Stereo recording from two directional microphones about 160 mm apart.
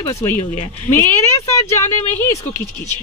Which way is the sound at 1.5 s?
15° left (ahead or behind).